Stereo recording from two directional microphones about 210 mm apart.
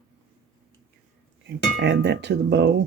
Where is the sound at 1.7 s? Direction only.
55° right (ahead or behind).